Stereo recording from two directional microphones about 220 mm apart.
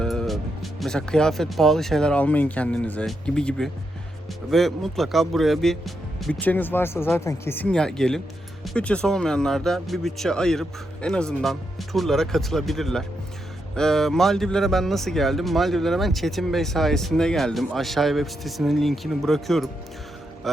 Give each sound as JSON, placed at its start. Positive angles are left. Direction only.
{"t": 0.0, "sound": "speech", "side_deg": 0}